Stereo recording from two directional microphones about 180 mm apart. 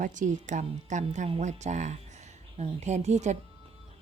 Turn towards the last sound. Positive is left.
turn(degrees=-40)  # may be behind; listen again after turning